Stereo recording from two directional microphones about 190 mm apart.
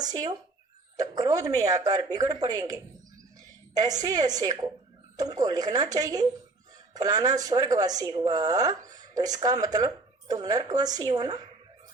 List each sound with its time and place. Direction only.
0.0 s speech: 20° right (ahead or behind)